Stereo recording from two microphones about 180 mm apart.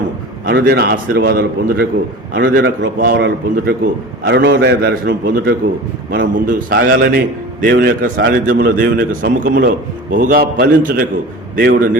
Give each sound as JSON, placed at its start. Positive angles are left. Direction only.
{"t": 0.4, "sound": "a man's voice", "side_deg": -55}
{"t": 2.3, "sound": "a man's voice", "side_deg": -85}
{"t": 3.0, "sound": "a man's voice", "side_deg": -65}